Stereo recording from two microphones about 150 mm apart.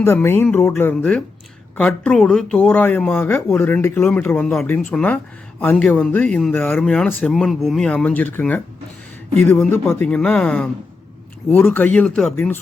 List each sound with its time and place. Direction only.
0.0 s speech: 15° left (ahead or behind)